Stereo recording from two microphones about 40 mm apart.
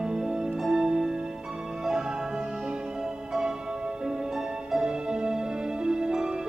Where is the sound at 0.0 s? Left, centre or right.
Centre.